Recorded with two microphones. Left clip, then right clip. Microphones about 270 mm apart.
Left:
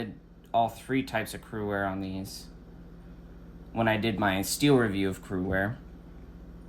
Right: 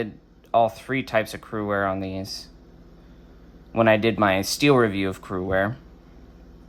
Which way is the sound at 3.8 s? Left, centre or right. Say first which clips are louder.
Right 9 dB; right.